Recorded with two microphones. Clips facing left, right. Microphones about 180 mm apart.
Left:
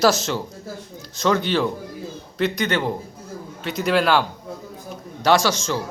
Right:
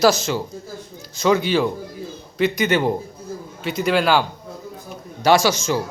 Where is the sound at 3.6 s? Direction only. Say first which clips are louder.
Right 1 dB; centre (ahead or behind).